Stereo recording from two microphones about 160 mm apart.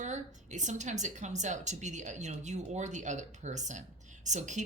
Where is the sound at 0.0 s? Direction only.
50° right (ahead or behind).